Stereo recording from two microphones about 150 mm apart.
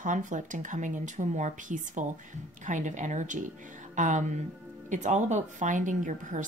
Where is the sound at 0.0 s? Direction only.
60° right (ahead or behind).